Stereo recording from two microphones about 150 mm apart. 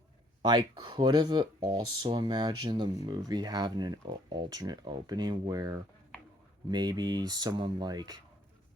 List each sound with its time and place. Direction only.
0.4 s speech: 30° right (ahead or behind)